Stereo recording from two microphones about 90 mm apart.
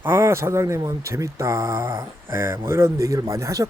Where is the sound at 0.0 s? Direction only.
25° right (ahead or behind).